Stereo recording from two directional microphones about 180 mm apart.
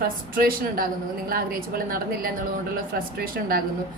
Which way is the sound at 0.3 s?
55° right (ahead or behind).